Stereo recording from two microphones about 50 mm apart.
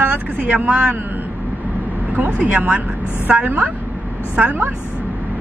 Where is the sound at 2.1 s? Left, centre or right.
Right.